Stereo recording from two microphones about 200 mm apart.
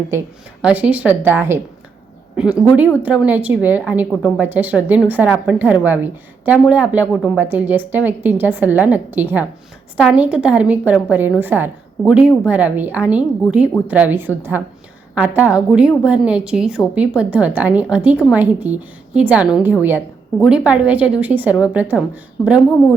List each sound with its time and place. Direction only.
0.6 s a woman's voice: 5° right (ahead or behind)